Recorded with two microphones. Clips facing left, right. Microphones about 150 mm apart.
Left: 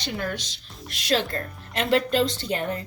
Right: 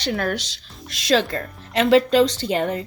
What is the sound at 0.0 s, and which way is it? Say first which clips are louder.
A woman's voice: right 6 dB; 85° right.